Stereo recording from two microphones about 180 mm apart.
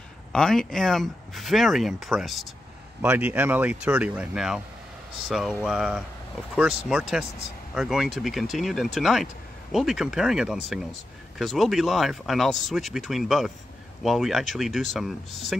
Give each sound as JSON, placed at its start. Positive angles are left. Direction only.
{"t": 0.3, "sound": "speech", "side_deg": 5}